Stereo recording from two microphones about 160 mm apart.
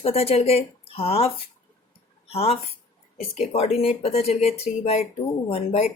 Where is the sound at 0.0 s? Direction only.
40° left (ahead or behind).